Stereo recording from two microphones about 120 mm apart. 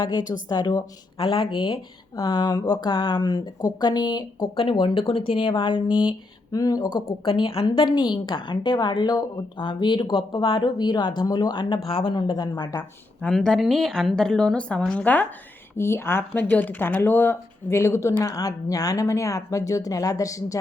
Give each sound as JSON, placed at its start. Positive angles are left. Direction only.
{"t": 0.0, "sound": "a woman's voice", "side_deg": 35}
{"t": 6.1, "sound": "speech", "side_deg": 30}
{"t": 7.3, "sound": "speech", "side_deg": 50}
{"t": 7.9, "sound": "a woman's voice", "side_deg": 40}
{"t": 13.2, "sound": "a woman's voice", "side_deg": 5}